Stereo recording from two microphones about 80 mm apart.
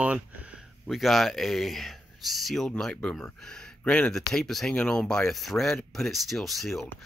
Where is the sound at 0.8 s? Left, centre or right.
Centre.